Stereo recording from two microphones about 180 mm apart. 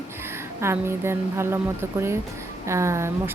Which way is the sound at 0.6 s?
15° right (ahead or behind).